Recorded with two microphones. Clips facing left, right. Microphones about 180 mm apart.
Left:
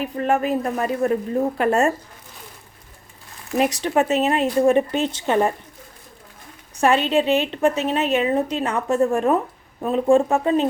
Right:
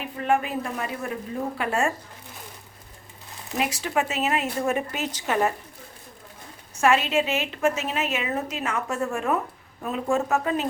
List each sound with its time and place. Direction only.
0.0 s a woman's voice: 40° left (ahead or behind)
3.6 s a woman's voice: 35° left (ahead or behind)
6.7 s a woman's voice: 35° left (ahead or behind)